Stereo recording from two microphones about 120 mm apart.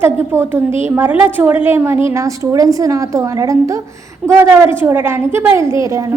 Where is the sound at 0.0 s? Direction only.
20° right (ahead or behind).